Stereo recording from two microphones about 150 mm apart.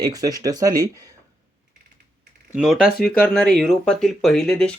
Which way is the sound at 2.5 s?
5° right (ahead or behind).